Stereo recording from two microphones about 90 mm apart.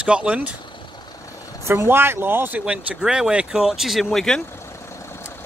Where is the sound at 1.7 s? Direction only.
25° right (ahead or behind).